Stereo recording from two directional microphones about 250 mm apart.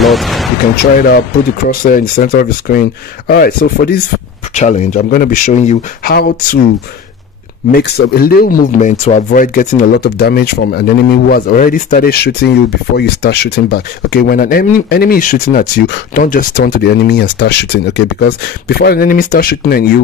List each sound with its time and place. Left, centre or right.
0.0 s a sound: centre
0.9 s speech: left
7.7 s speech: left